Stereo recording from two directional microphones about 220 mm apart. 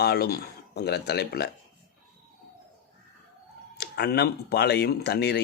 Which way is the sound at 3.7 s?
50° left (ahead or behind).